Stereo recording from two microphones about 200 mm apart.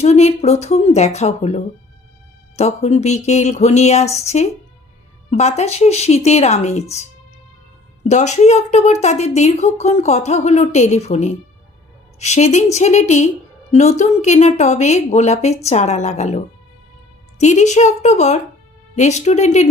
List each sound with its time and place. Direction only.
0.0 s a woman's voice: 35° left (ahead or behind)
8.0 s a woman's voice: 35° left (ahead or behind)